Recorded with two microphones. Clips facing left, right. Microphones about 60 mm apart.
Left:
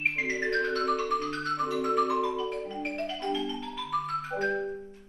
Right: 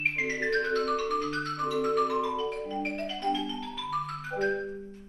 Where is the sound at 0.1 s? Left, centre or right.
Centre.